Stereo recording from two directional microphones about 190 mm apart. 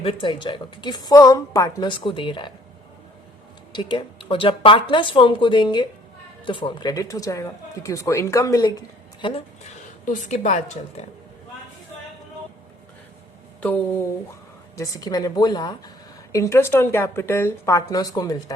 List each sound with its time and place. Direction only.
0.0 s a woman's voice: 25° left (ahead or behind)
3.8 s a woman's voice: 25° left (ahead or behind)
9.2 s speech: 30° left (ahead or behind)
14.8 s a woman's voice: 20° left (ahead or behind)